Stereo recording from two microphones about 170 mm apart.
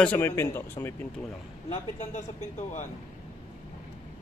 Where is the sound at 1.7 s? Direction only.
40° left (ahead or behind).